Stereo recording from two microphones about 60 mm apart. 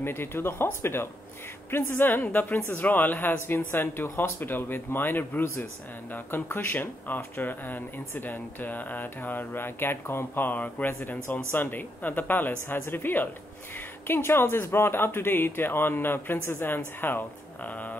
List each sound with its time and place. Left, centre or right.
0.0 s a woman's voice: left